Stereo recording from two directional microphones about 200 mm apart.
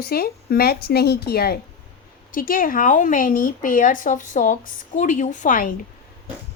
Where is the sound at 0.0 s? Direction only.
50° left (ahead or behind).